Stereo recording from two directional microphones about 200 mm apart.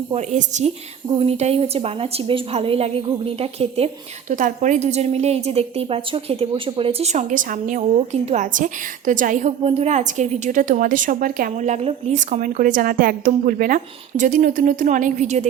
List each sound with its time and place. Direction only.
0.1 s a woman's voice: 35° right (ahead or behind)